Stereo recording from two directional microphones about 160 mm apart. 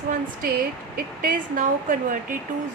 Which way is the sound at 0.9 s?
60° right (ahead or behind).